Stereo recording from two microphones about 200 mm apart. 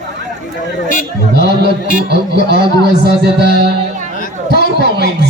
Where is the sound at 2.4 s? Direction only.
50° right (ahead or behind).